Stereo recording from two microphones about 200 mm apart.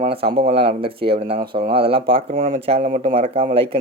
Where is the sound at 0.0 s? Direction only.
30° right (ahead or behind).